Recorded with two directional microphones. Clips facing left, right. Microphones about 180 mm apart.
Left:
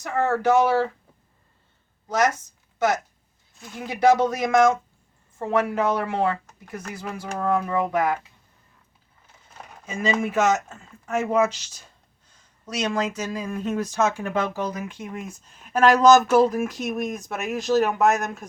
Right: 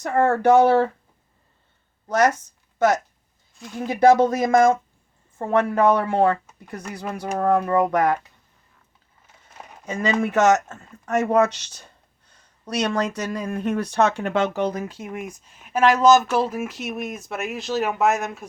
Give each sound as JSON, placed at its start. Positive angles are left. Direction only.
{"t": 0.0, "sound": "speech", "side_deg": -55}
{"t": 4.1, "sound": "speech", "side_deg": -50}
{"t": 9.8, "sound": "speech", "side_deg": -70}
{"t": 14.8, "sound": "speech", "side_deg": -35}
{"t": 15.4, "sound": "speech", "side_deg": -5}